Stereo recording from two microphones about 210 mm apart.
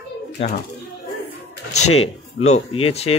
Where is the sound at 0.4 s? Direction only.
25° left (ahead or behind).